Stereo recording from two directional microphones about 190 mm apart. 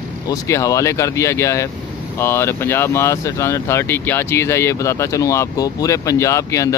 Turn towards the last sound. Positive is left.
turn(degrees=15)  # may be behind; listen again after turning